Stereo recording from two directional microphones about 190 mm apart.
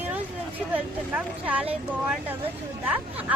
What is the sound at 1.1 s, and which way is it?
Speech, 5° right (ahead or behind).